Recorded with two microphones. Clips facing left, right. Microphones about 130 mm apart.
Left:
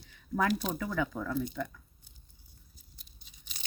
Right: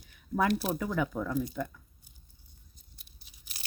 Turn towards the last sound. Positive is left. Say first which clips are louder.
# even
turn(degrees=-5)  # may be behind; listen again after turning